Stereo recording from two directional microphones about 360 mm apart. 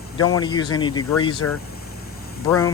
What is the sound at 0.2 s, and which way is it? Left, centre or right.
Speech, centre.